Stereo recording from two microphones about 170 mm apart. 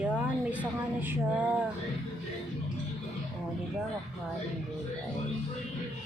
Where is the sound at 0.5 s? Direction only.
10° right (ahead or behind).